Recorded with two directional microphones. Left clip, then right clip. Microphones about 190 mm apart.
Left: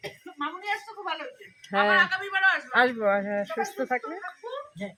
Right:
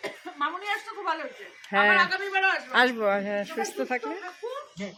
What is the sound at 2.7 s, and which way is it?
Speech, centre (ahead or behind).